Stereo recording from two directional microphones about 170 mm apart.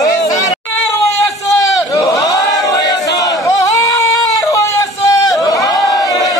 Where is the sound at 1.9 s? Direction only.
20° left (ahead or behind).